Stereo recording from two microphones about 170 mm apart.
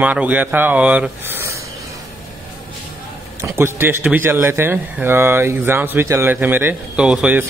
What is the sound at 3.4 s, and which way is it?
Speech, 15° right (ahead or behind).